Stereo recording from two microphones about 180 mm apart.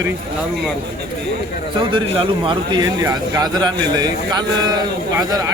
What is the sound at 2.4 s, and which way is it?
A man's voice, 25° right (ahead or behind).